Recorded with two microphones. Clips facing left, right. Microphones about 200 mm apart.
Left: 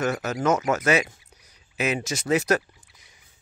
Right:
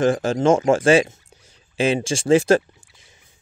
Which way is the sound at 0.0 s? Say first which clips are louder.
Right 7 dB; 30° right (ahead or behind).